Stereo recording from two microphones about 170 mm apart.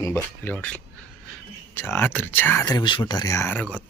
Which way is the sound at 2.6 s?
25° left (ahead or behind).